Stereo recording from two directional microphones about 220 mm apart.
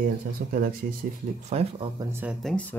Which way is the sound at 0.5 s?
40° right (ahead or behind).